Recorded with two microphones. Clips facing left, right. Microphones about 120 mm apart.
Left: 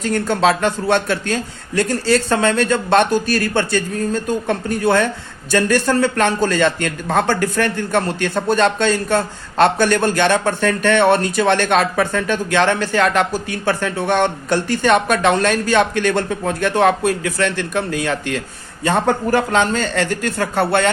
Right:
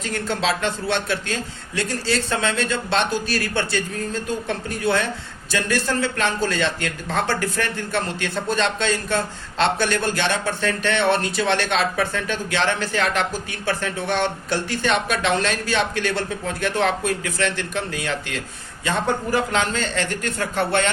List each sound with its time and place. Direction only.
0.0 s a man's voice: 45° left (ahead or behind)